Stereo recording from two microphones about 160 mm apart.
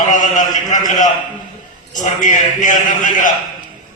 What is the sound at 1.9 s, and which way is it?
A man's voice, 55° left (ahead or behind).